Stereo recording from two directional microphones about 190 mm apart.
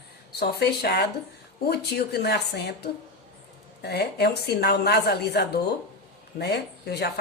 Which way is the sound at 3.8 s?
60° left (ahead or behind).